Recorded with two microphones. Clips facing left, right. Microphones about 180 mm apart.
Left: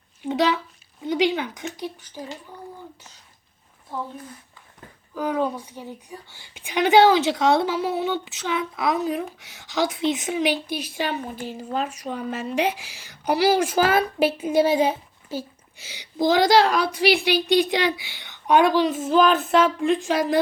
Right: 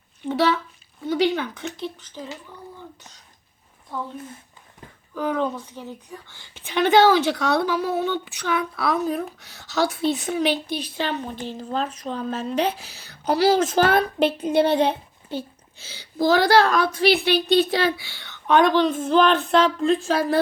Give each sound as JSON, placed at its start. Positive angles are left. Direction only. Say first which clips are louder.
{"t": 0.2, "sound": "a sound", "louder": "right 1 dB", "side_deg": 15}
{"t": 1.0, "sound": "a woman's voice", "louder": "right 1 dB", "side_deg": 15}
{"t": 5.1, "sound": "a woman's voice", "louder": "even", "side_deg": 10}